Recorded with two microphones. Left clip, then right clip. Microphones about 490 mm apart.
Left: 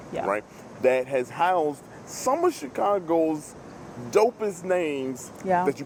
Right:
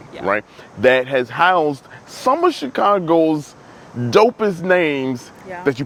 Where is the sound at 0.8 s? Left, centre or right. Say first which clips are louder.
Right 8 dB; right.